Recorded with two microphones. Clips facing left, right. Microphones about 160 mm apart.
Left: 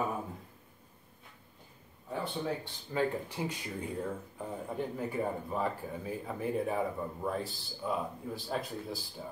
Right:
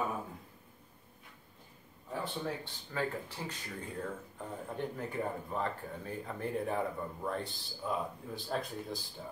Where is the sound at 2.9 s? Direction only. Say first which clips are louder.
Left 5 dB; 15° left (ahead or behind).